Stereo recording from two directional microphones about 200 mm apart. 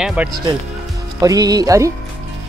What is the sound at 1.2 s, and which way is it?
Speech, 20° right (ahead or behind).